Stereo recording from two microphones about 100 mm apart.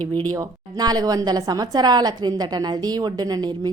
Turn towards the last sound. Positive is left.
turn(degrees=-40)  # may be behind; listen again after turning